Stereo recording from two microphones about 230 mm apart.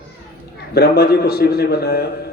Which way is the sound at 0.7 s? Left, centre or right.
Left.